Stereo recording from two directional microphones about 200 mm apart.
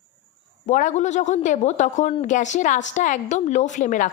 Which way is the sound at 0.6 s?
40° left (ahead or behind).